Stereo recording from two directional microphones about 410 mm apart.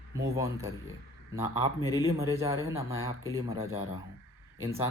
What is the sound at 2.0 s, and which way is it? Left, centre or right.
Speech, centre.